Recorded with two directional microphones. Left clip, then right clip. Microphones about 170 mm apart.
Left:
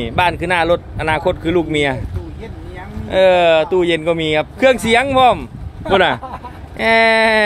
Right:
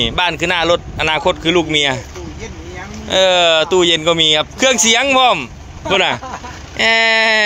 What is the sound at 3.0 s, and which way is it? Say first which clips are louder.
Speech: even; centre (ahead or behind).